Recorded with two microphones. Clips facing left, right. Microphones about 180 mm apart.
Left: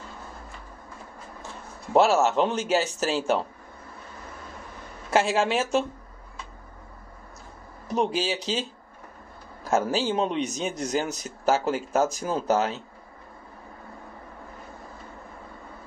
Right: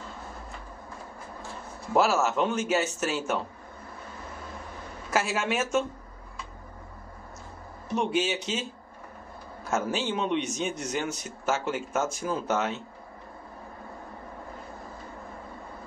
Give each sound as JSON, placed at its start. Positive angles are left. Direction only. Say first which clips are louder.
{"t": 2.0, "sound": "a man's voice", "louder": "left 4 dB", "side_deg": 30}
{"t": 5.1, "sound": "speech", "louder": "left 5 dB", "side_deg": 30}
{"t": 7.9, "sound": "a man's voice", "louder": "left 1 dB", "side_deg": 35}
{"t": 9.7, "sound": "a man's voice", "louder": "left 4 dB", "side_deg": 35}